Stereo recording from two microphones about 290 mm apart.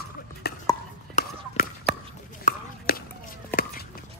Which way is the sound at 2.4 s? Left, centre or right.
Left.